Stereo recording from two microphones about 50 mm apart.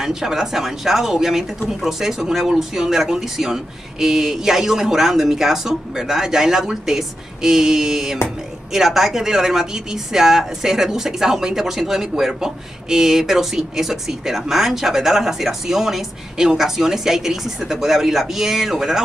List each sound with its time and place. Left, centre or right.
0.0 s speech: centre